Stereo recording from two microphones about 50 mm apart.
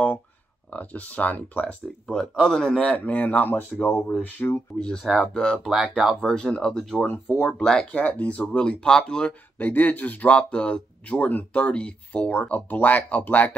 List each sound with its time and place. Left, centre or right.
0.7 s speech: left
2.0 s speech: centre
2.8 s speech: left
4.7 s speech: centre
5.7 s speech: centre
6.2 s speech: centre
8.0 s speech: left
8.5 s speech: centre
9.6 s speech: left
10.3 s speech: left